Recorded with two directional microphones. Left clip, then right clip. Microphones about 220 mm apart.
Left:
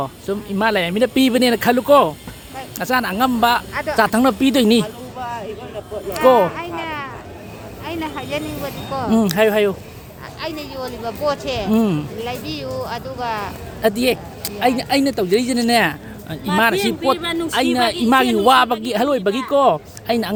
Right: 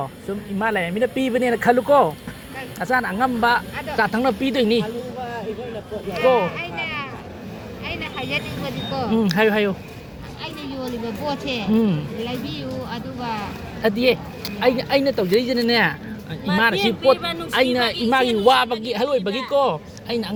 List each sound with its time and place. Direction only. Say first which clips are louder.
0.0 s speech: left 5 dB; 40° left (ahead or behind)
1.6 s a man's voice: left 1 dB; 30° left (ahead or behind)
6.1 s a sound: left 5 dB; 25° left (ahead or behind)
7.9 s vehicle: left 2 dB; 25° left (ahead or behind)
9.0 s speech: left 3 dB; 35° left (ahead or behind)
10.4 s a man's voice: left 4 dB; 40° left (ahead or behind)
16.7 s speech: left 1 dB; 50° left (ahead or behind)
18.1 s a man's voice: left 3 dB; 40° left (ahead or behind)